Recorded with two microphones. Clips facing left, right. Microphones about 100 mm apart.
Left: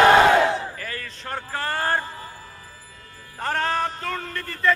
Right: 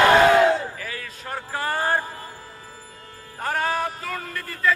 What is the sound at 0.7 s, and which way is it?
A man's voice, 5° right (ahead or behind).